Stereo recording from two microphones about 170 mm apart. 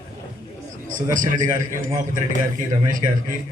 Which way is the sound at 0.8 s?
50° right (ahead or behind).